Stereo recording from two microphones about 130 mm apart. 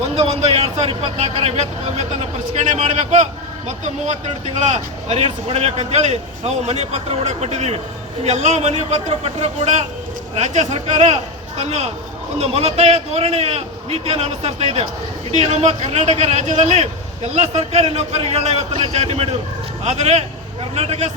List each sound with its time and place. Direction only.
0.2 s a man's voice: 50° right (ahead or behind)